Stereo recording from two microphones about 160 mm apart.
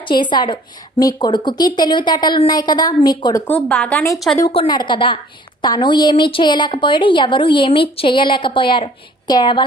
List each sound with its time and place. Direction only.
0.0 s a woman's voice: 30° left (ahead or behind)
3.4 s speech: 10° left (ahead or behind)
4.5 s a woman's voice: 30° left (ahead or behind)